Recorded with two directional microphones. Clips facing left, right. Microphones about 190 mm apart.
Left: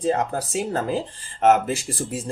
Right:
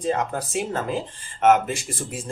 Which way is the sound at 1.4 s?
40° left (ahead or behind).